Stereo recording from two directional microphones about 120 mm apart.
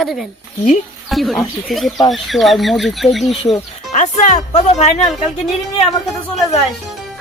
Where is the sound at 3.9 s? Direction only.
85° left; by 5.1 s 65° left (ahead or behind).